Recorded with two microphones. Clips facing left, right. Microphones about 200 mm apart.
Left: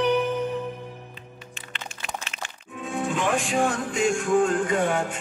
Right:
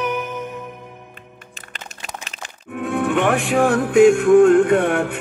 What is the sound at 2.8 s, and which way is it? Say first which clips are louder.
Music: right 7 dB; 60° right (ahead or behind).